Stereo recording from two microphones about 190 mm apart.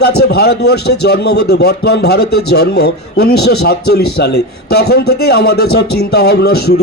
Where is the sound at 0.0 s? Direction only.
55° left (ahead or behind).